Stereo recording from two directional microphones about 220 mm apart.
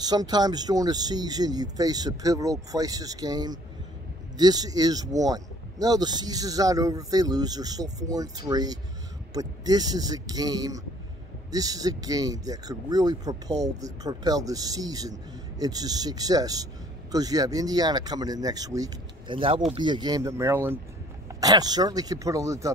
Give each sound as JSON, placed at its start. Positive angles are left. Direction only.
{"t": 0.0, "sound": "speech", "side_deg": -20}